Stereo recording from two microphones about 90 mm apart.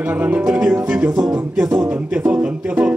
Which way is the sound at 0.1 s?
15° right (ahead or behind).